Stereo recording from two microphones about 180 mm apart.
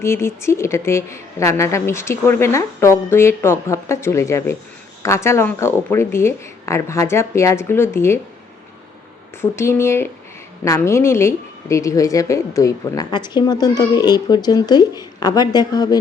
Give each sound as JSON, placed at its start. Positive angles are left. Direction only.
{"t": 0.0, "sound": "a woman's voice", "side_deg": 15}
{"t": 9.4, "sound": "a woman's voice", "side_deg": 15}